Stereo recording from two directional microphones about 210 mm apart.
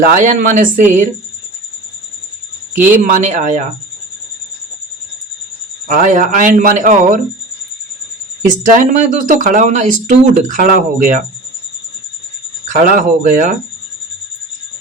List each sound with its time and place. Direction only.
0.0 s speech: 40° right (ahead or behind)
2.9 s speech: 40° right (ahead or behind)
5.9 s speech: 40° right (ahead or behind)
8.4 s speech: 40° right (ahead or behind)
12.6 s speech: 40° right (ahead or behind)